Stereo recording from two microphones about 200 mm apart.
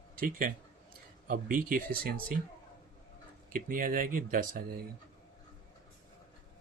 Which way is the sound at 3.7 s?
45° right (ahead or behind).